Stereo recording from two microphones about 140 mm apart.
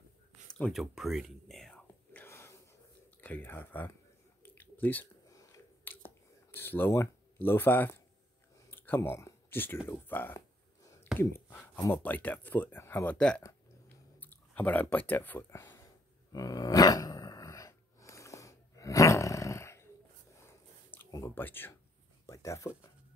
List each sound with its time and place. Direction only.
0.5 s whispering: 5° left (ahead or behind)
2.2 s gasp: 20° left (ahead or behind)
3.2 s speech: 15° left (ahead or behind)
4.4 s a sound: 15° left (ahead or behind)
11.5 s speech: 15° left (ahead or behind)
16.3 s dog: 25° left (ahead or behind)
20.4 s a sound: 15° left (ahead or behind)